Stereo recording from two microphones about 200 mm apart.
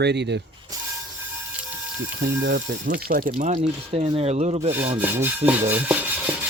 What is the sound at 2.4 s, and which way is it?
Speech, 55° right (ahead or behind).